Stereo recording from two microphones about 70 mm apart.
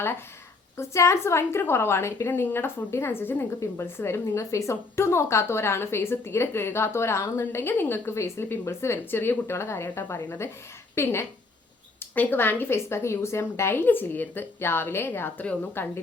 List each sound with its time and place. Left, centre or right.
0.8 s a woman's voice: left